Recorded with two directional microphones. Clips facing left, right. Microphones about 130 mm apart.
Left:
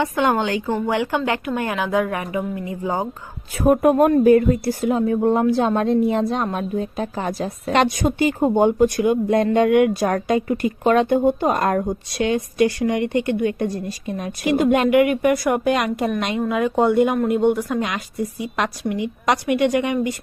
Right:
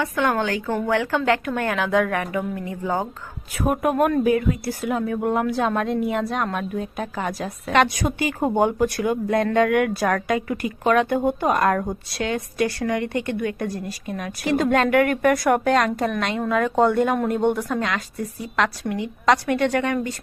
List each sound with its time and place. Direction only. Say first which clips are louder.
0.0 s a woman's voice: left 3 dB; 20° left (ahead or behind)
3.6 s speech: left 5 dB; 30° left (ahead or behind)
4.6 s a woman's voice: left 5 dB; 25° left (ahead or behind)